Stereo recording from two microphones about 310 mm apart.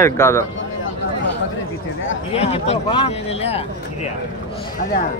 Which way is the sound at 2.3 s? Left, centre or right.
Centre.